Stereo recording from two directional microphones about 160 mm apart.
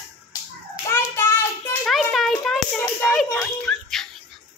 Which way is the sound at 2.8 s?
15° left (ahead or behind).